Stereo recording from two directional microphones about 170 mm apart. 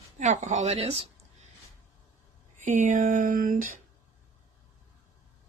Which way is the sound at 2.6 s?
45° right (ahead or behind).